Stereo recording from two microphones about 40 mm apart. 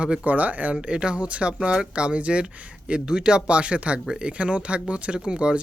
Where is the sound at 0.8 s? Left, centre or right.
Right.